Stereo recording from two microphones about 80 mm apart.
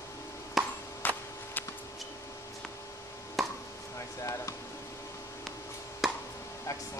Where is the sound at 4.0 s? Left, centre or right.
Left.